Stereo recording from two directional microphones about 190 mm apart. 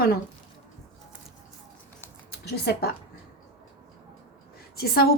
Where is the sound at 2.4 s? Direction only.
55° left (ahead or behind).